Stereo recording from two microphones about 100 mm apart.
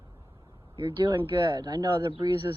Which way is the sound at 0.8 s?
55° right (ahead or behind).